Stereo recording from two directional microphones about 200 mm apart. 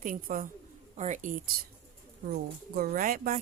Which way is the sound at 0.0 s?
45° right (ahead or behind).